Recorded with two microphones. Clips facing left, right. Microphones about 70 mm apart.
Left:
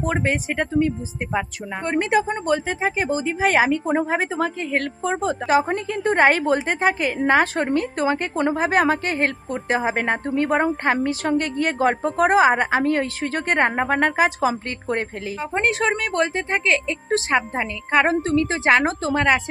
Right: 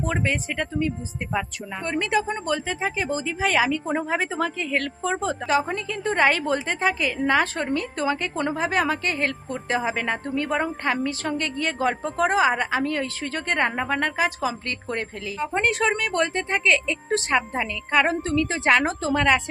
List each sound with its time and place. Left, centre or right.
0.1 s speech: left
1.3 s a woman's voice: left
5.2 s speech: centre
5.6 s a woman's voice: left
8.5 s speech: left
9.6 s a woman's voice: left
9.9 s speech: left
14.4 s speech: left
15.4 s speech: centre
18.2 s speech: centre